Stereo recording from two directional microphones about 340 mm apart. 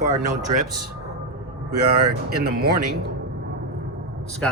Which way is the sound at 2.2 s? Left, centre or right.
Right.